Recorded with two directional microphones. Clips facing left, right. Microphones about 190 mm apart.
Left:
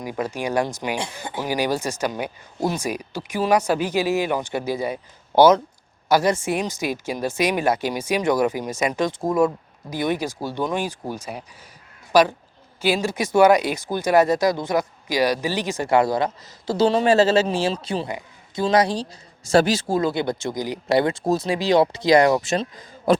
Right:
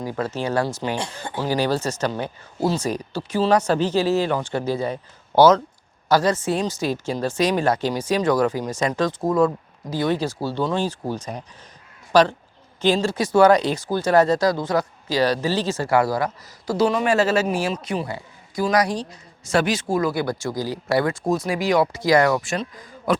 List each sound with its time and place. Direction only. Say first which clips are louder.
0.0 s speech: right 1 dB; 15° left (ahead or behind)
9.9 s a man's voice: right 2 dB; 15° left (ahead or behind)